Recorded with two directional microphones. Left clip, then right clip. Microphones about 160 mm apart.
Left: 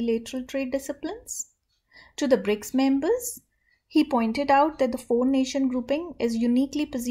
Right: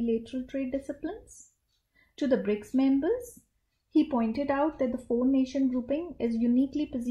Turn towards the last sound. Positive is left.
turn(degrees=5)  # may be behind; listen again after turning